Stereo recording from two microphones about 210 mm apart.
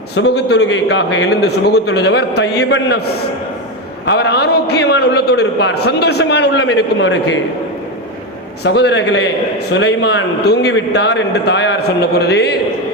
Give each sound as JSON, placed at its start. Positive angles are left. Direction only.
{"t": 0.2, "sound": "a man's voice", "side_deg": 55}
{"t": 4.0, "sound": "a man's voice", "side_deg": 55}
{"t": 8.6, "sound": "a man's voice", "side_deg": 50}